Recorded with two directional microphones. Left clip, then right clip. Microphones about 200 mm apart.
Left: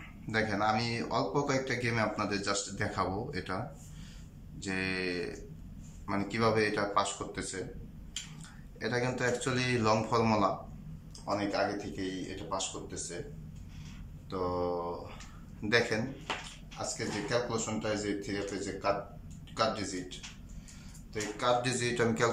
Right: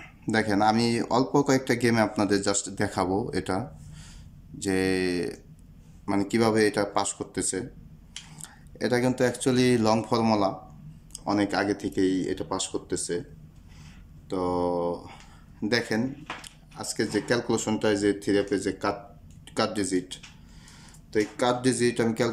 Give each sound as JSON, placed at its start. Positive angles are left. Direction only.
{"t": 0.3, "sound": "speech", "side_deg": -30}
{"t": 11.2, "sound": "speech", "side_deg": -40}
{"t": 14.3, "sound": "speech", "side_deg": -30}
{"t": 16.7, "sound": "speech", "side_deg": -40}
{"t": 21.1, "sound": "speech", "side_deg": -30}